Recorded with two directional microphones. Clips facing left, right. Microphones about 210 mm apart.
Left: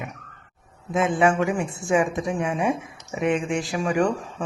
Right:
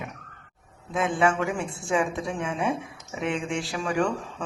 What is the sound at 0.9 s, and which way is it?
A woman's voice, 20° left (ahead or behind).